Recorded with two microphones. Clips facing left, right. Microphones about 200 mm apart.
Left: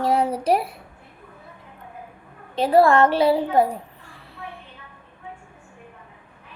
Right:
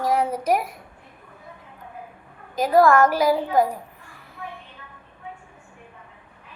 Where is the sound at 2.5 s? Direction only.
30° left (ahead or behind).